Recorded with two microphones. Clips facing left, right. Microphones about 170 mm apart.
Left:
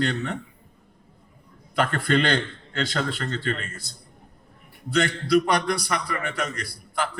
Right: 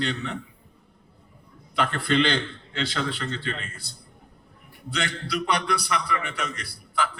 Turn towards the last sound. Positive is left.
turn(degrees=45)  # may be behind; listen again after turning